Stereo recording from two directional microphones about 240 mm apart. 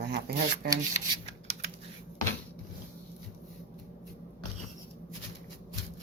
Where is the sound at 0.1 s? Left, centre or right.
Right.